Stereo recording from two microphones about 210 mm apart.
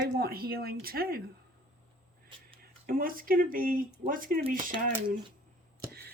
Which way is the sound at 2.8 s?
40° right (ahead or behind).